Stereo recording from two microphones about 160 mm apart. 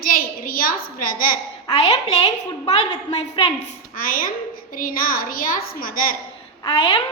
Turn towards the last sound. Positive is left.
turn(degrees=35)  # may be behind; listen again after turning